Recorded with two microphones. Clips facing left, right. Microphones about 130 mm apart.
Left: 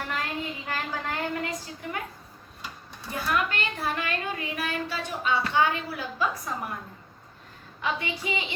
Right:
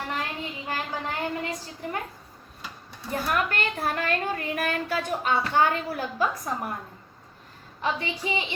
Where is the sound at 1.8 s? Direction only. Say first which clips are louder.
Right 3 dB; 35° right (ahead or behind).